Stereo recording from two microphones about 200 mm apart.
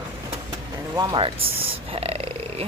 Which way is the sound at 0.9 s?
20° right (ahead or behind).